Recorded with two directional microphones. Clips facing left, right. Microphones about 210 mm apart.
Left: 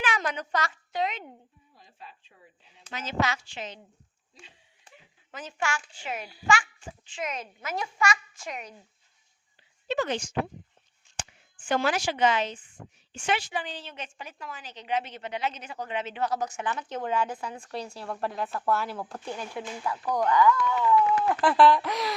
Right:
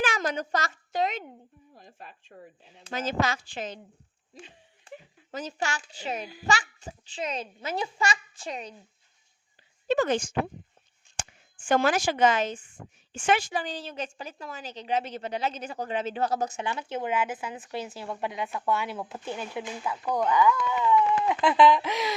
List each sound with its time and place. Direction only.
0.0 s a woman's voice: 40° right (ahead or behind)
5.3 s a woman's voice: 40° right (ahead or behind)
9.8 s a woman's voice: 45° right (ahead or behind); by 19.3 s centre (ahead or behind)
19.4 s speech: 15° right (ahead or behind)
20.8 s speech: centre (ahead or behind)